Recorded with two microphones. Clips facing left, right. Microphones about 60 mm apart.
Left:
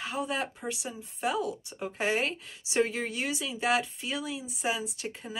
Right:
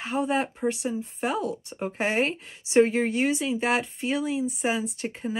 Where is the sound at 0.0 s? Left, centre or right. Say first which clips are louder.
Right 6 dB; right.